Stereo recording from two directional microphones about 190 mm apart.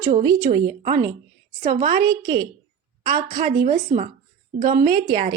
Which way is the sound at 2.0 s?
20° right (ahead or behind).